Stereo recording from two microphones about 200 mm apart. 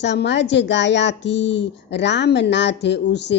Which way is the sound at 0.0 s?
60° left (ahead or behind).